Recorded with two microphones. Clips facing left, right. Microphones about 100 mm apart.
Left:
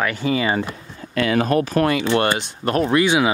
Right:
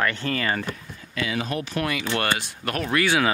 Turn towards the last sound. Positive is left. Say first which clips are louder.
# left 5 dB
turn(degrees=20)  # may be behind; listen again after turning